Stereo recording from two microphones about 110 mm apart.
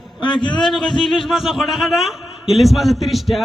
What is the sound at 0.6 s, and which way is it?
A man's voice, centre (ahead or behind).